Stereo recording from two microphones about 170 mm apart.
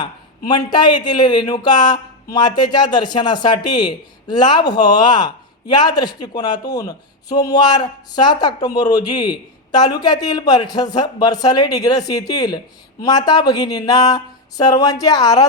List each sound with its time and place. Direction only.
0.0 s a man's voice: 25° left (ahead or behind)